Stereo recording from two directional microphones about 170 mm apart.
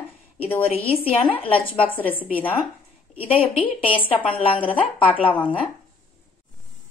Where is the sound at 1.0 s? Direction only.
35° left (ahead or behind).